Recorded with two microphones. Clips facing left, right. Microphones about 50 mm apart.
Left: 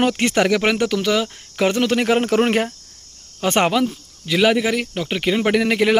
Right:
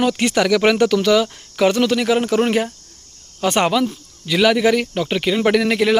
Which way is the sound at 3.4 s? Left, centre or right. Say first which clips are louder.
Right 1 dB; left.